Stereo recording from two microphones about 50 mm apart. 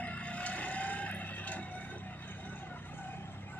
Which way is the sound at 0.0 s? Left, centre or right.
Left.